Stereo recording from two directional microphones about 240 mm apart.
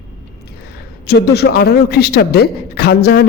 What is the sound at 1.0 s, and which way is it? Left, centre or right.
A man's voice, left.